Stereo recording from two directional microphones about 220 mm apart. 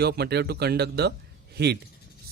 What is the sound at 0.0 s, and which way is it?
Speech, 45° right (ahead or behind).